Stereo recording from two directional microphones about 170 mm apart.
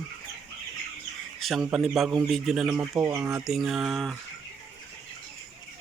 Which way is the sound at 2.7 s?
15° right (ahead or behind).